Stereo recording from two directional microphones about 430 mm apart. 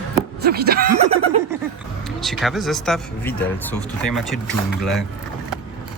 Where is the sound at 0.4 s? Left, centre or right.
Right.